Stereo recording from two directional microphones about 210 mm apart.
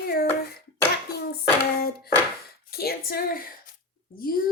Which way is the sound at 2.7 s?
45° left (ahead or behind).